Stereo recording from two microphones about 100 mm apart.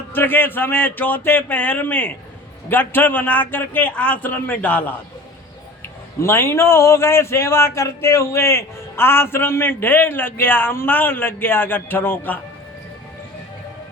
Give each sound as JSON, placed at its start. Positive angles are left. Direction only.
{"t": 0.1, "sound": "a man's voice", "side_deg": 20}
{"t": 6.2, "sound": "speech", "side_deg": 25}